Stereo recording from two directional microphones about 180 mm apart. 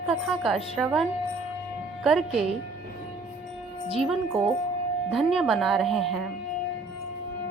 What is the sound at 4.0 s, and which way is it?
Speech, centre (ahead or behind).